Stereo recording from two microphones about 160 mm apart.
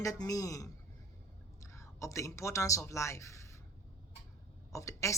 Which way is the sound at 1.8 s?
20° left (ahead or behind).